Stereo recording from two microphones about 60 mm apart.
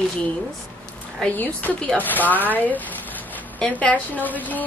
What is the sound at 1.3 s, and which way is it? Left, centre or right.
Speech, left.